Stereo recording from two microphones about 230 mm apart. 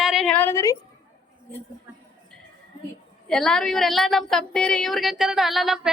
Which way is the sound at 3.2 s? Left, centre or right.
Centre.